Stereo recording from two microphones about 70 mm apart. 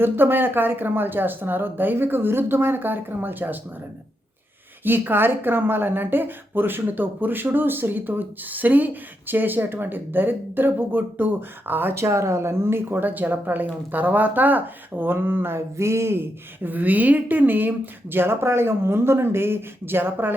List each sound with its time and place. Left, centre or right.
0.0 s speech: right
4.8 s speech: right
16.6 s speech: right